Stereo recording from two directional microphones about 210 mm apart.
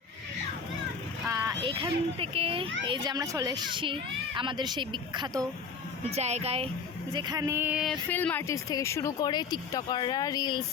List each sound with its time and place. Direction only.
1.6 s speech: 25° right (ahead or behind)
6.1 s speech: 30° right (ahead or behind)
7.1 s female singing: 20° right (ahead or behind); by 7.9 s 5° right (ahead or behind)
8.1 s speech: 10° left (ahead or behind)